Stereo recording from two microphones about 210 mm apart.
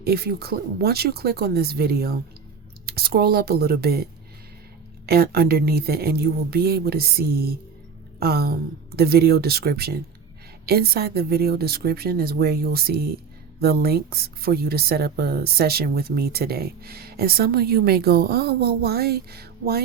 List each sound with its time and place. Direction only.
0.0 s a woman's voice: 45° right (ahead or behind)